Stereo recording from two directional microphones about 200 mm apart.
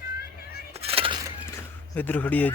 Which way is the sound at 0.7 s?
30° right (ahead or behind).